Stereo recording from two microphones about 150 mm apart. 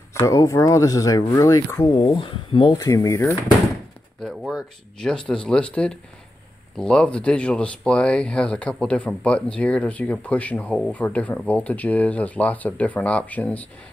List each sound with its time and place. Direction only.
0.1 s speech: 20° left (ahead or behind)
2.0 s speech: 35° left (ahead or behind); by 3.3 s 20° left (ahead or behind)
4.2 s speech: centre (ahead or behind)